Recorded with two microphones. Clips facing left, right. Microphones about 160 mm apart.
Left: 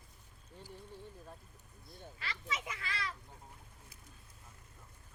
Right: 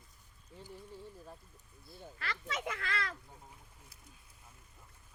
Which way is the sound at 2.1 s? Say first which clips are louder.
Right 2 dB; 60° right (ahead or behind).